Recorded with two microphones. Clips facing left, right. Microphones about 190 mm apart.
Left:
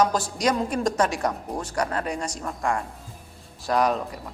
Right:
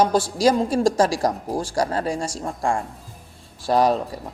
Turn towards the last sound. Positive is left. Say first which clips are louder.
# right 4 dB
turn(degrees=-35)  # may be behind; listen again after turning